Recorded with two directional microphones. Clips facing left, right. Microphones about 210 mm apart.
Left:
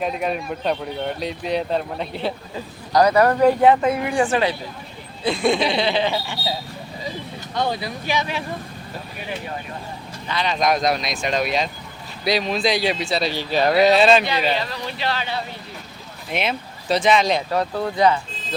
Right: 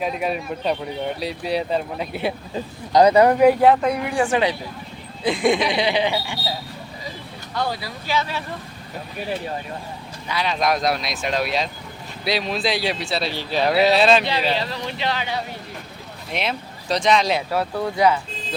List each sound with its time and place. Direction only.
0.0 s speech: centre (ahead or behind)
2.9 s speech: 20° right (ahead or behind)
3.6 s speech: centre (ahead or behind)
4.3 s speech: 15° right (ahead or behind)
7.5 s speech: 20° left (ahead or behind)
10.2 s speech: 5° right (ahead or behind)
14.6 s speech: 25° right (ahead or behind)
16.3 s speech: centre (ahead or behind)